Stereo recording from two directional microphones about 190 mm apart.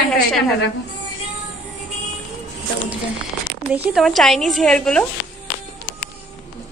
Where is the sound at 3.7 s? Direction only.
5° right (ahead or behind).